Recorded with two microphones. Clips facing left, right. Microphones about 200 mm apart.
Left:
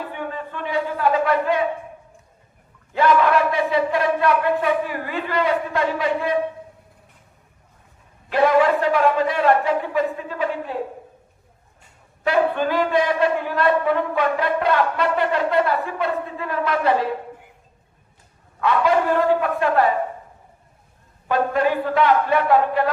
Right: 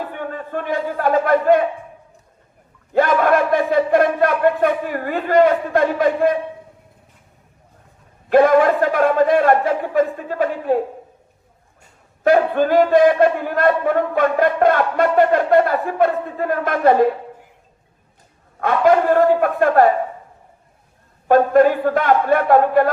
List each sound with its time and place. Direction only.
0.2 s a sound: 50° right (ahead or behind)
2.9 s a man's voice: 50° right (ahead or behind)
8.3 s a man's voice: 50° right (ahead or behind)
12.2 s a man's voice: 45° right (ahead or behind)
18.6 s a man's voice: 50° right (ahead or behind)
21.2 s a man's voice: 50° right (ahead or behind)